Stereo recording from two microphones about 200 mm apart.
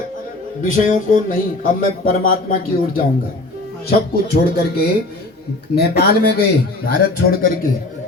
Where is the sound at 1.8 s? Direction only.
45° left (ahead or behind).